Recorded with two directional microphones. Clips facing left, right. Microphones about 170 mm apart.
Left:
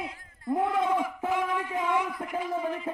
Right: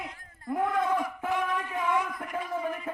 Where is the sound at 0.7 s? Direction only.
10° left (ahead or behind).